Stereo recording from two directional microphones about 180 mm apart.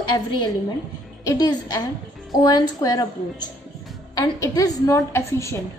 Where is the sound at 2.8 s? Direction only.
20° left (ahead or behind).